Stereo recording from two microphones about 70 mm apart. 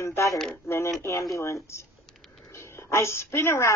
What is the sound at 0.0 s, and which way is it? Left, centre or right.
A woman's voice, left.